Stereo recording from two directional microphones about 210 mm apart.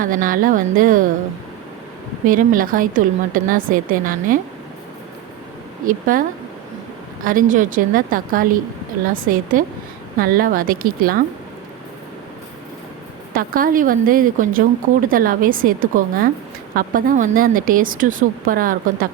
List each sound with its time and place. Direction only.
0.0 s a woman's voice: 40° right (ahead or behind)
2.2 s a woman's voice: 40° right (ahead or behind)
5.8 s a woman's voice: 40° right (ahead or behind)
7.3 s a woman's voice: 40° right (ahead or behind)
13.3 s a woman's voice: 45° right (ahead or behind)